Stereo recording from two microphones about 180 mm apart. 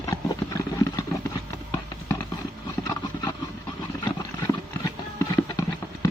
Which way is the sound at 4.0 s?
20° left (ahead or behind).